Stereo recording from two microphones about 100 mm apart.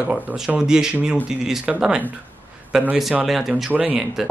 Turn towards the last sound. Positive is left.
turn(degrees=-15)  # may be behind; listen again after turning